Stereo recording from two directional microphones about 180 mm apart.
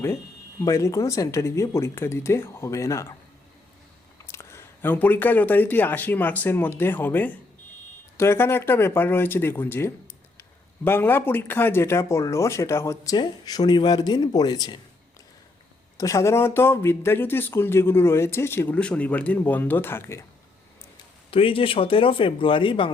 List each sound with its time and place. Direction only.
0.6 s speech: 15° left (ahead or behind)
4.3 s speech: 15° left (ahead or behind)
16.0 s speech: 15° left (ahead or behind)
21.2 s speech: 30° left (ahead or behind)